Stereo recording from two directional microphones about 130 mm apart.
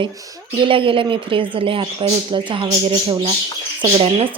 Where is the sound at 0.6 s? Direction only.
40° right (ahead or behind).